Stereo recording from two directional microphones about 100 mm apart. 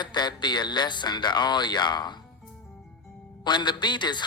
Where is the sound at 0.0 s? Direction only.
45° left (ahead or behind).